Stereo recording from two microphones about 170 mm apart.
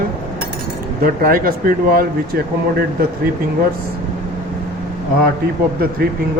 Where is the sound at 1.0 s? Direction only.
60° right (ahead or behind).